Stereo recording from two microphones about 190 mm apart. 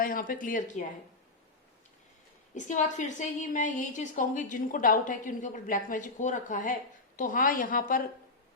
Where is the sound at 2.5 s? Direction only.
40° left (ahead or behind).